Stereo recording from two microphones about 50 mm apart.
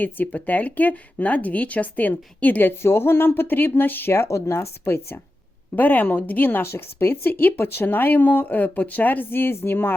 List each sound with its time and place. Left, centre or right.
0.0 s speech: left
4.3 s speech: left
4.9 s speech: left
5.7 s speech: left
6.7 s speech: left